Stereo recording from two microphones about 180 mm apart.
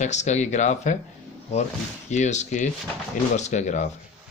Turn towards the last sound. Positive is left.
turn(degrees=40)  # may be behind; listen again after turning